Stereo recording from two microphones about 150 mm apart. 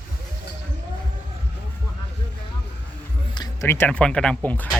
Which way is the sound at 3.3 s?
30° left (ahead or behind).